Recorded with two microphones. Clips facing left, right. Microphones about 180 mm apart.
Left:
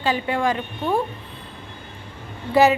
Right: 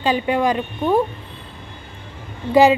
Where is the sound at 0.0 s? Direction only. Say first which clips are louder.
Right 3 dB; 15° right (ahead or behind).